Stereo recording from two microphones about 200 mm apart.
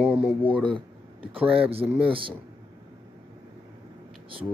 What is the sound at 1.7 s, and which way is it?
Speech, 30° right (ahead or behind).